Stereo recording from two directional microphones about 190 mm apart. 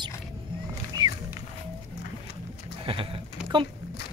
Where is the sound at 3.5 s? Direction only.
20° right (ahead or behind).